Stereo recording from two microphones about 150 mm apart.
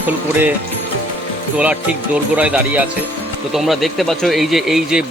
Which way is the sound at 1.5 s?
10° right (ahead or behind).